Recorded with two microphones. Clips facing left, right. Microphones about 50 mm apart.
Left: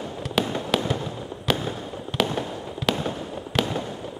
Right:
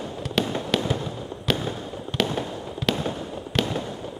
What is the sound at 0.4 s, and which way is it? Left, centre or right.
Fireworks, centre.